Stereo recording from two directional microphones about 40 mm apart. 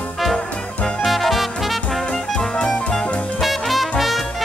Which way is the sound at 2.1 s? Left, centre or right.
Left.